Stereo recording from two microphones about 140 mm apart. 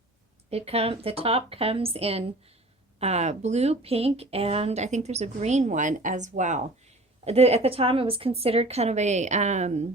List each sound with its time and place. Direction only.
0.5 s speech: 45° right (ahead or behind)
7.3 s speech: 50° right (ahead or behind)